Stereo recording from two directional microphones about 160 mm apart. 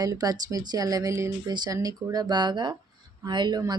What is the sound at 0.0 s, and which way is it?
Speech, 25° right (ahead or behind).